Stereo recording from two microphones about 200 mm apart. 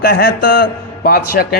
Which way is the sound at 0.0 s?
50° left (ahead or behind).